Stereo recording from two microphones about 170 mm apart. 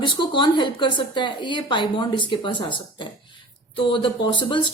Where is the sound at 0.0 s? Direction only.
30° left (ahead or behind).